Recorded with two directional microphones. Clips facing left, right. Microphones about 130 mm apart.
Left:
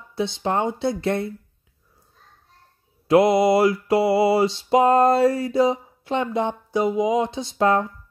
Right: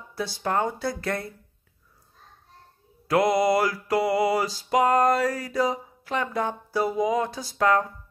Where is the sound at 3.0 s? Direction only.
25° left (ahead or behind).